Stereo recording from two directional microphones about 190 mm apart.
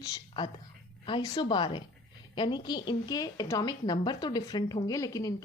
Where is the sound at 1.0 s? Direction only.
20° left (ahead or behind).